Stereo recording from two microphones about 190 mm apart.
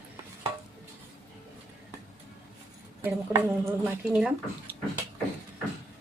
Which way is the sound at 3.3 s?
10° right (ahead or behind).